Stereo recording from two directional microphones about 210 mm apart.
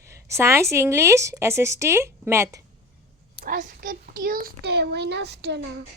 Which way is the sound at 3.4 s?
40° right (ahead or behind).